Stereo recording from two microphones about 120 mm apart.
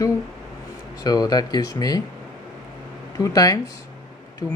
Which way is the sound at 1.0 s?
35° left (ahead or behind).